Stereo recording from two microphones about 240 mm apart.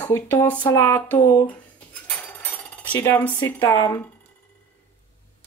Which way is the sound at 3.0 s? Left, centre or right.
Centre.